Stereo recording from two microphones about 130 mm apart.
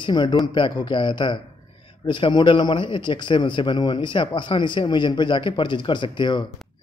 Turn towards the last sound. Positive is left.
turn(degrees=35)  # may be behind; listen again after turning